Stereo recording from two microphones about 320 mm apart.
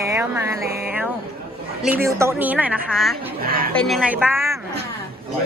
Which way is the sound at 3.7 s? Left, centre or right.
Centre.